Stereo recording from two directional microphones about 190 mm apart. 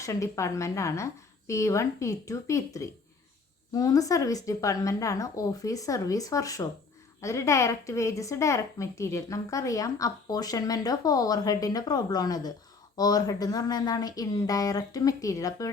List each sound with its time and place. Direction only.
0.0 s a woman's voice: 15° left (ahead or behind)